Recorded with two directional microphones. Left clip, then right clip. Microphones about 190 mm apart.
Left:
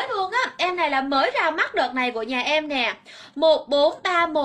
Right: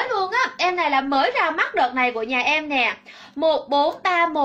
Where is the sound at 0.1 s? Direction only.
15° left (ahead or behind).